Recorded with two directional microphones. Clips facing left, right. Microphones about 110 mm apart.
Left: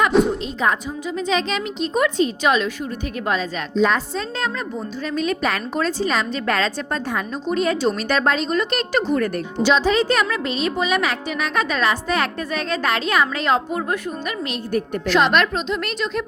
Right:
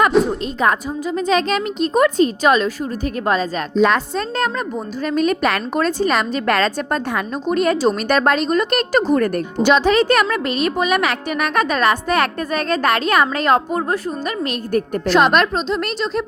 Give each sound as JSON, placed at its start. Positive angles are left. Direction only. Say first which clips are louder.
{"t": 0.1, "sound": "a sound", "louder": "right 1 dB", "side_deg": 0}
{"t": 0.6, "sound": "speech", "louder": "right 4 dB", "side_deg": -50}
{"t": 3.8, "sound": "a woman's voice", "louder": "right 3 dB", "side_deg": -65}